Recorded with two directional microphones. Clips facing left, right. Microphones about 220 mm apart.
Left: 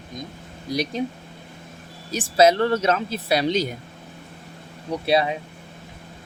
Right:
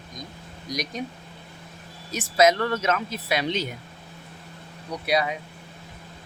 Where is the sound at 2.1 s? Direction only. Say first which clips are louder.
Left 3 dB; 30° left (ahead or behind).